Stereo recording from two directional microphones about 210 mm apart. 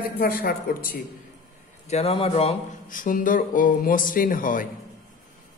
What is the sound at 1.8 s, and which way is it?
Speech, 30° left (ahead or behind).